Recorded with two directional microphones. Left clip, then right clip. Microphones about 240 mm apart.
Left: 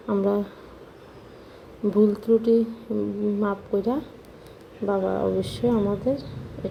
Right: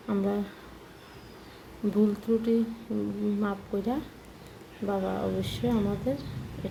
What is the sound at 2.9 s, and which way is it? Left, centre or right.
A woman's voice, centre.